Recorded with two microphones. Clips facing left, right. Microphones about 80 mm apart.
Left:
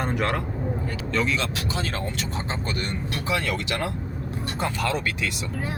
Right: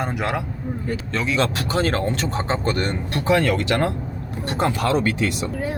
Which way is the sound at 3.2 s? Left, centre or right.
Right.